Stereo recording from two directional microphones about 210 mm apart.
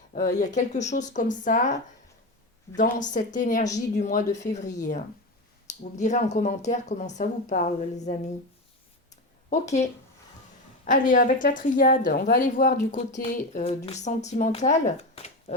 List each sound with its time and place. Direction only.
0.1 s speech: 40° left (ahead or behind)
9.5 s speech: 35° left (ahead or behind)
10.8 s speech: 40° left (ahead or behind)